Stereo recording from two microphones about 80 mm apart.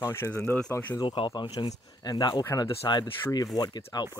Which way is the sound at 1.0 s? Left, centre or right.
Left.